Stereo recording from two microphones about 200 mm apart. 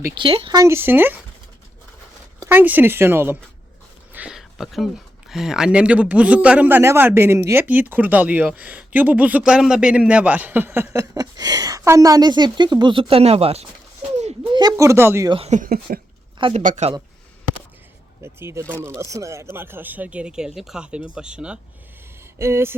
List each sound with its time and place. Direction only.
0.0 s speech: 25° right (ahead or behind)
2.4 s speech: 10° right (ahead or behind)
4.1 s a sound: 5° right (ahead or behind)
5.3 s speech: centre (ahead or behind); by 13.7 s 30° right (ahead or behind)
14.5 s speech: 20° right (ahead or behind)
15.3 s speech: 30° right (ahead or behind)
16.4 s speech: 30° right (ahead or behind)
18.2 s speech: 10° right (ahead or behind)